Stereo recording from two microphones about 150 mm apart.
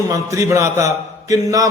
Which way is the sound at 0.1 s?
20° right (ahead or behind).